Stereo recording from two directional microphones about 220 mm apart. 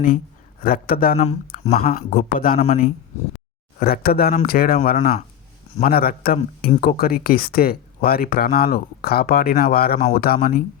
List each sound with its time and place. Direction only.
0.6 s speech: 40° left (ahead or behind)
1.7 s speech: 40° left (ahead or behind)